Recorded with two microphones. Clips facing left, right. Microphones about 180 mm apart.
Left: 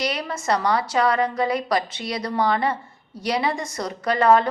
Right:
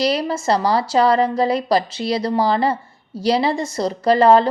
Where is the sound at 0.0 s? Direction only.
30° right (ahead or behind).